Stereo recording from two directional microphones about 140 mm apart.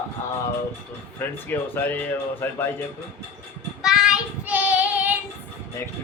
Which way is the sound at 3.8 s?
5° right (ahead or behind).